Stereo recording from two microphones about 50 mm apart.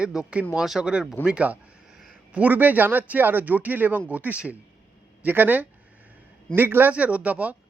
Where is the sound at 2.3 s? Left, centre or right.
Right.